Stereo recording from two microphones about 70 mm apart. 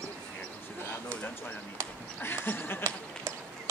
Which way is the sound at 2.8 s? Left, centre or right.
Right.